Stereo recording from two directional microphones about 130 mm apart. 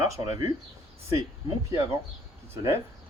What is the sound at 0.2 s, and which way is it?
Speech, 30° right (ahead or behind).